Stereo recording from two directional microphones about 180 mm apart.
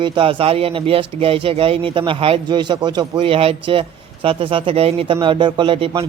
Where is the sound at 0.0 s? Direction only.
30° right (ahead or behind).